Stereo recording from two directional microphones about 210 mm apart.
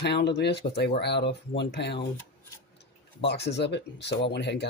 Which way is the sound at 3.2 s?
55° left (ahead or behind).